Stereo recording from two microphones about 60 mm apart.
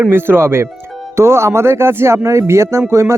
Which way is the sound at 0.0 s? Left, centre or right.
Right.